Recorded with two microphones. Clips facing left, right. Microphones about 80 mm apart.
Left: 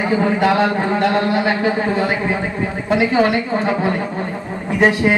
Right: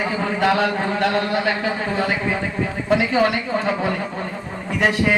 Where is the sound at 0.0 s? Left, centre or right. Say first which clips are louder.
Left 4 dB; left.